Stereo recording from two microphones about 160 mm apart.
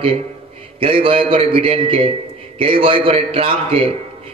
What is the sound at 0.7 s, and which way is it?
A man's voice, 35° right (ahead or behind).